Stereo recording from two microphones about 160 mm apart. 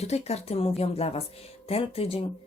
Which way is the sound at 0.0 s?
40° left (ahead or behind).